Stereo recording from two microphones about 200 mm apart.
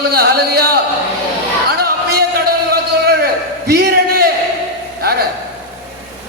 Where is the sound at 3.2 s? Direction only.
50° right (ahead or behind).